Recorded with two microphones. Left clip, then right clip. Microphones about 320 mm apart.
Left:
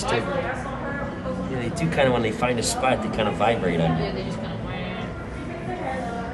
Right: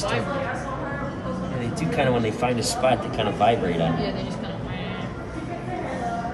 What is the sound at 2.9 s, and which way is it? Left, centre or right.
Speech, right.